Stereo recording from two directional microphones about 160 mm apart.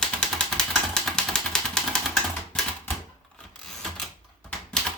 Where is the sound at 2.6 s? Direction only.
5° left (ahead or behind).